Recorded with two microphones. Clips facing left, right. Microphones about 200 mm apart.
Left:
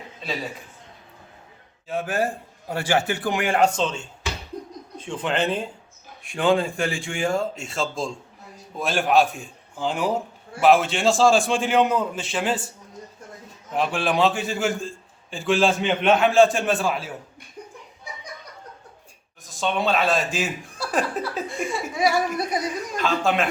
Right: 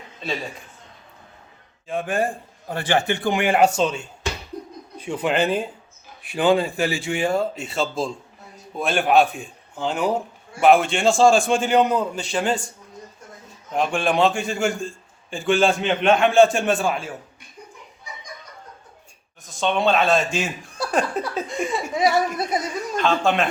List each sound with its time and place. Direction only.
1.9 s a man's voice: 5° left (ahead or behind)
13.7 s a man's voice: 5° left (ahead or behind)
19.5 s a man's voice: centre (ahead or behind)
21.2 s a sound: centre (ahead or behind)
21.5 s laughter: 20° right (ahead or behind)
23.0 s a man's voice: 5° left (ahead or behind)